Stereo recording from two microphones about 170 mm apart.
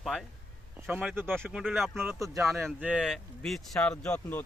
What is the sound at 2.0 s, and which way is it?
Speech, 15° right (ahead or behind).